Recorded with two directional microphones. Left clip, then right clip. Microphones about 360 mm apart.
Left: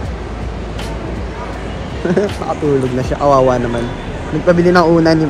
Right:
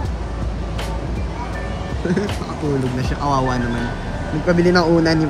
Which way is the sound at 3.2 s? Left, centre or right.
Left.